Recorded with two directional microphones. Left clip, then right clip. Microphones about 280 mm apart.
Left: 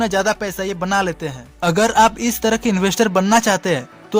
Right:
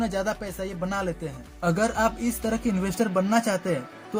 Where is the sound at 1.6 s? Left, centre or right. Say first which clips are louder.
Left 10 dB; left.